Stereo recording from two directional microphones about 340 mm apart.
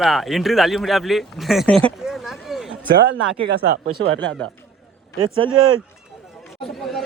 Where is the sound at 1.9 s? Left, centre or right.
Centre.